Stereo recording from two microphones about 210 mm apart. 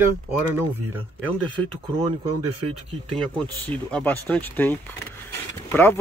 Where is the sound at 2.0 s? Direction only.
25° right (ahead or behind).